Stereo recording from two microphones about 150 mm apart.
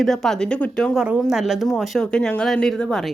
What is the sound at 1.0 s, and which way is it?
A woman's voice, 5° right (ahead or behind).